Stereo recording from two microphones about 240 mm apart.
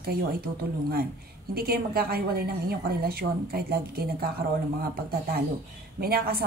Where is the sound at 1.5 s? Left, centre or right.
Right.